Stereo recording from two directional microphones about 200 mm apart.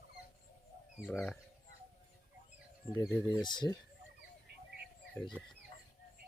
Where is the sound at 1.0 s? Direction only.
5° left (ahead or behind).